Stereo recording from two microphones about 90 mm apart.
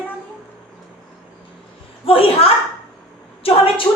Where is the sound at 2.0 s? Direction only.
90° left.